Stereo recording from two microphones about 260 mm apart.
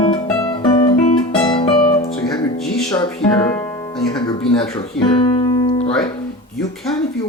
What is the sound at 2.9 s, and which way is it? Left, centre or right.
Music, centre.